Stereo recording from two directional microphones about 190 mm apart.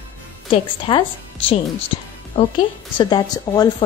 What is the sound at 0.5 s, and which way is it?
A woman's voice, 25° left (ahead or behind).